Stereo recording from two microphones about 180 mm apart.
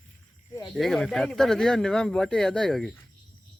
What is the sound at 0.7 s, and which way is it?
Speech, centre (ahead or behind).